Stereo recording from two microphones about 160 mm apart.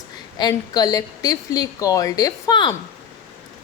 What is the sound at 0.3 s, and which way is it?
A woman's voice, 25° left (ahead or behind).